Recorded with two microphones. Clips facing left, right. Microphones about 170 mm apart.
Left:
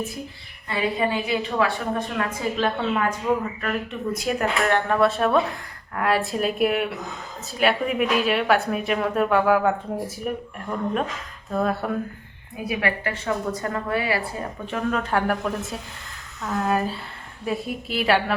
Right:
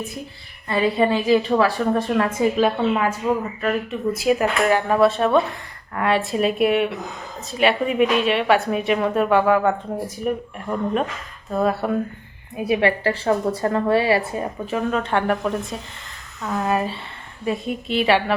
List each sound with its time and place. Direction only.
0.7 s a woman's voice: 35° right (ahead or behind)
2.6 s a woman's voice: 10° right (ahead or behind)
10.7 s a woman's voice: 10° right (ahead or behind)
12.5 s a woman's voice: 25° right (ahead or behind)
14.7 s speech: centre (ahead or behind)